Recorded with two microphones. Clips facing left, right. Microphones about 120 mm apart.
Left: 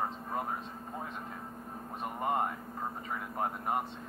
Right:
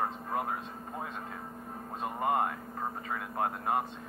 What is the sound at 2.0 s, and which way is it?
Speech, 20° right (ahead or behind).